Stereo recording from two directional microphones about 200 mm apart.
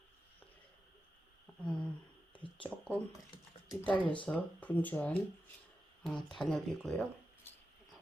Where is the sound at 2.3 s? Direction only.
25° left (ahead or behind).